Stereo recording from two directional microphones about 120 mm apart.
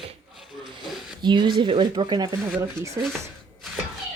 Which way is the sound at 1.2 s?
40° right (ahead or behind).